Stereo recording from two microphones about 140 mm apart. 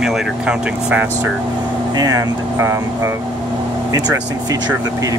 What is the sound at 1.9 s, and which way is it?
Speech, 25° right (ahead or behind).